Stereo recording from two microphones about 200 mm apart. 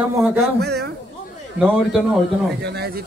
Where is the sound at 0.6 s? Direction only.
55° right (ahead or behind).